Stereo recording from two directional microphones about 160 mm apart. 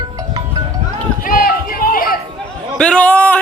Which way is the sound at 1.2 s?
60° left (ahead or behind).